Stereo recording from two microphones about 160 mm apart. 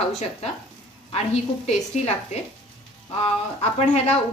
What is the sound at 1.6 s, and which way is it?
Speech, 45° left (ahead or behind).